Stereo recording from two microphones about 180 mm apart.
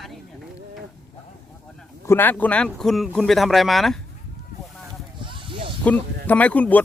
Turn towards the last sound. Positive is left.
turn(degrees=10)  # may be behind; listen again after turning